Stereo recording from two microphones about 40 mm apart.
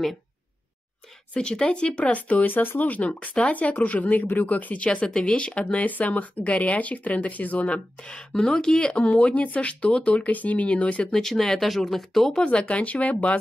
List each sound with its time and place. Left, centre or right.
1.3 s speech: left
2.8 s speech: left
8.3 s speech: centre
8.9 s speech: left
11.1 s speech: centre
12.4 s speech: left